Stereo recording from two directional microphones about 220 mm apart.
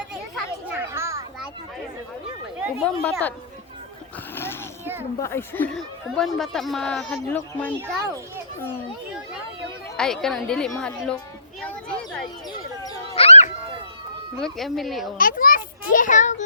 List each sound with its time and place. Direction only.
0.8 s children playing: 10° right (ahead or behind)
2.6 s speech: 5° left (ahead or behind)
5.2 s speech: 10° left (ahead or behind)
10.0 s speech: centre (ahead or behind)
11.6 s a sound: 5° left (ahead or behind)
13.1 s a sound: 30° left (ahead or behind)
14.4 s speech: centre (ahead or behind)
15.2 s a child's voice: 40° left (ahead or behind)